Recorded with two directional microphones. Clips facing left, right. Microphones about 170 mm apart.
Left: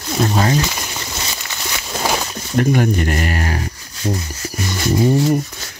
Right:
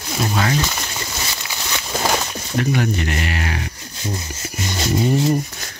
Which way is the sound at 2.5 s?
45° left (ahead or behind).